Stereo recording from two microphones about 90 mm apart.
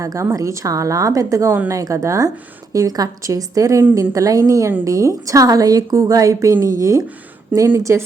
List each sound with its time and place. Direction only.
0.0 s a woman's voice: 40° right (ahead or behind)